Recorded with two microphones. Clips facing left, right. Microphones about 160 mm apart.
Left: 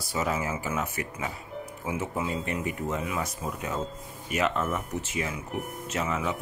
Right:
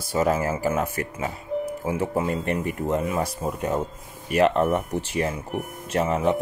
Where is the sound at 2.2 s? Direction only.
60° right (ahead or behind).